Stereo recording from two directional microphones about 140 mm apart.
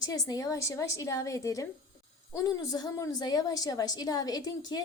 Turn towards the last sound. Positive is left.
turn(degrees=30)  # may be behind; listen again after turning